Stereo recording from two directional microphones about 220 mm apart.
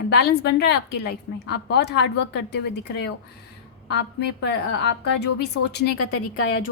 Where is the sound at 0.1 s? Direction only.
45° left (ahead or behind).